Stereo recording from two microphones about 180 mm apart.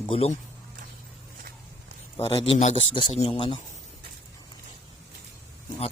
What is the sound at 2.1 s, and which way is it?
A man's voice, 30° left (ahead or behind).